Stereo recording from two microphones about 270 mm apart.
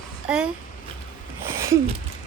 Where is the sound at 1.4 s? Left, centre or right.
Centre.